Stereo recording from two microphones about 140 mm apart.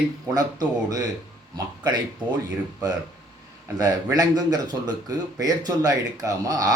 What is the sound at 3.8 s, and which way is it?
Speech, 25° right (ahead or behind).